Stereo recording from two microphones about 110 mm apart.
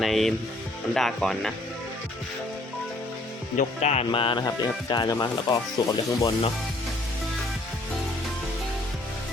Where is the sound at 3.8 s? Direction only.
80° left.